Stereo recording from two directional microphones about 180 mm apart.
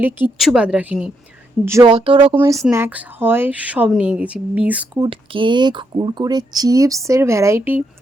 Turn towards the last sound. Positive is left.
turn(degrees=-15)  # may be behind; listen again after turning